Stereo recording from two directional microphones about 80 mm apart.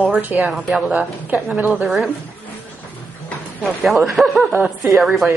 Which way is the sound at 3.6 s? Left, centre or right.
Centre.